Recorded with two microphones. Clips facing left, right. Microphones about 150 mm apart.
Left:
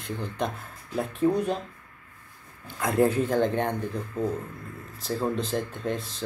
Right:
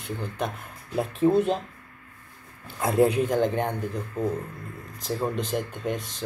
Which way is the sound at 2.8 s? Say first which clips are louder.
Right 2 dB; 20° right (ahead or behind).